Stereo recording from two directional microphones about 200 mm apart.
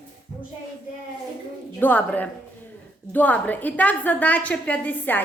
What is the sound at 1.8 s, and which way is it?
A woman's voice, 10° left (ahead or behind).